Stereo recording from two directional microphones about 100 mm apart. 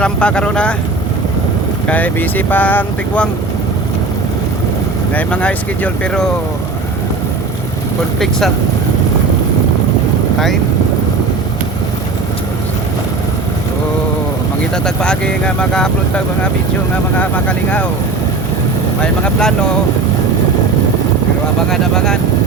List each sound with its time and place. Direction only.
0.0 s speech: 10° left (ahead or behind)
1.9 s speech: 15° left (ahead or behind)
5.1 s speech: 10° left (ahead or behind)
14.8 s speech: 10° left (ahead or behind)
19.2 s speech: 5° left (ahead or behind)
21.7 s speech: 5° left (ahead or behind)